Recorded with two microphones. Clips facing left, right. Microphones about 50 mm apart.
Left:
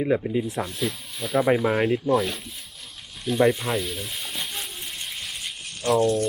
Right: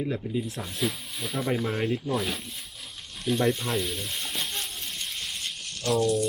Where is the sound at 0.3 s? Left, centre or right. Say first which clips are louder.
Left 5 dB; left.